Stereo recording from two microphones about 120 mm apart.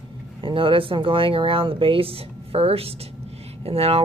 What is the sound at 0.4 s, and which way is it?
Speech, 45° right (ahead or behind).